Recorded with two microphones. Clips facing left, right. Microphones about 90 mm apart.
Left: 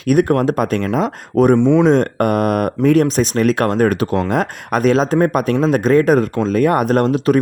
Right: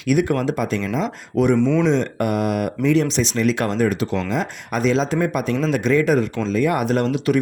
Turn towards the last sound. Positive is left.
turn(degrees=40)  # may be behind; listen again after turning